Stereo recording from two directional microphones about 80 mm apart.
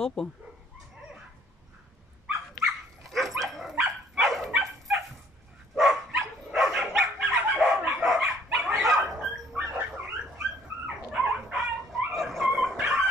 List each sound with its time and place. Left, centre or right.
0.0 s speech: centre
3.0 s dog: centre
7.3 s dog: centre
8.1 s dog: centre
9.6 s dog: right
11.1 s dog: centre